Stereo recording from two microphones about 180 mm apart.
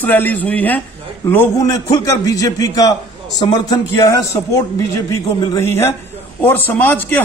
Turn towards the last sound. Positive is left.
turn(degrees=10)  # may be behind; listen again after turning